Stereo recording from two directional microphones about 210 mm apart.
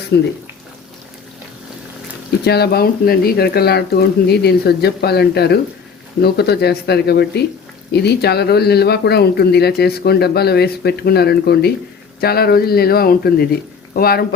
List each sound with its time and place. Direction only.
0.1 s speech: 55° left (ahead or behind)
2.4 s speech: 50° left (ahead or behind)